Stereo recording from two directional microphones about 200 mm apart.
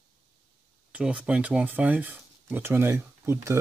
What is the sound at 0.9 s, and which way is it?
Speech, 5° right (ahead or behind).